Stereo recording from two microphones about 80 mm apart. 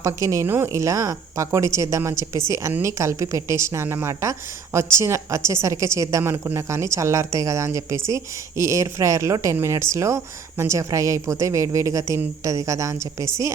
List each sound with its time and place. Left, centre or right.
0.0 s a woman's voice: right